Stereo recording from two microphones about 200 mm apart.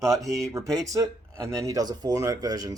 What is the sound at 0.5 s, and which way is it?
Speech, 15° right (ahead or behind).